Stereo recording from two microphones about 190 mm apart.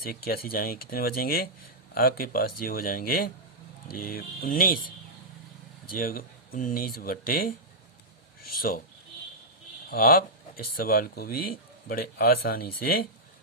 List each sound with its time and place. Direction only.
0.0 s speech: 50° left (ahead or behind)
6.0 s speech: 50° left (ahead or behind)
9.9 s speech: 50° left (ahead or behind)